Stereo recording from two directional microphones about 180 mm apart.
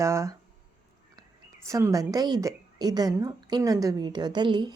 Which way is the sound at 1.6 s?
15° right (ahead or behind).